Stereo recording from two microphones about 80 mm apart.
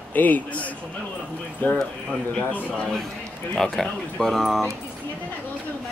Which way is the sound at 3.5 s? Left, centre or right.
Centre.